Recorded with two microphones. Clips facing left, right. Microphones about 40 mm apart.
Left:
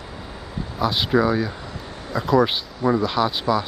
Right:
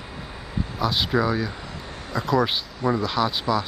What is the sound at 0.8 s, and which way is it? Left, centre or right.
Speech, centre.